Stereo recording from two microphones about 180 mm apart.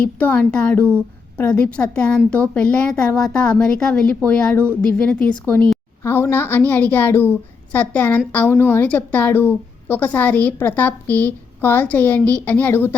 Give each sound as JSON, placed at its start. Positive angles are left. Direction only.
{"t": 0.0, "sound": "a woman's voice", "side_deg": 10}